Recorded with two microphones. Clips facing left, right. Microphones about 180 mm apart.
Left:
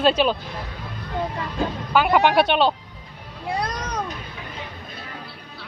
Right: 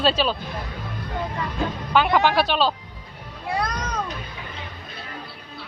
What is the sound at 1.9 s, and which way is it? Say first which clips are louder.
Speech: left 2 dB; 10° left (ahead or behind).